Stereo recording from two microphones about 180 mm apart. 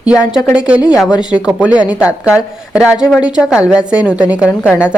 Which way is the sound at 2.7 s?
5° right (ahead or behind).